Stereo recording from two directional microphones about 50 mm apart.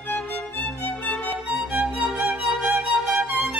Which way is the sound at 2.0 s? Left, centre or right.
Centre.